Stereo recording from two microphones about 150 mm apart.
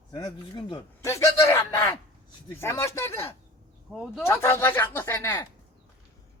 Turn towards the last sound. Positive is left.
turn(degrees=15)  # may be behind; listen again after turning